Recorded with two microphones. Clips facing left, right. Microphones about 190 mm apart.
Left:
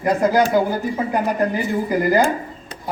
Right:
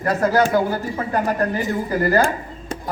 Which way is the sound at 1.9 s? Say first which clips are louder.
Left 1 dB; 15° left (ahead or behind).